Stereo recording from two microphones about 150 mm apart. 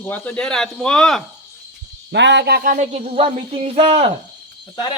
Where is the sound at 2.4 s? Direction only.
80° right; by 4.0 s 45° right (ahead or behind).